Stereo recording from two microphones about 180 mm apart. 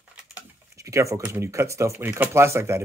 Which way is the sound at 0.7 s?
15° right (ahead or behind).